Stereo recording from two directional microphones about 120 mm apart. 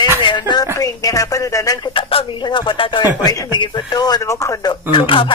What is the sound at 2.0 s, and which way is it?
Speech, 45° left (ahead or behind).